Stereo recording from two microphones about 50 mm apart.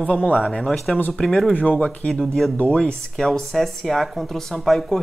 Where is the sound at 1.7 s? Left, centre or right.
Left.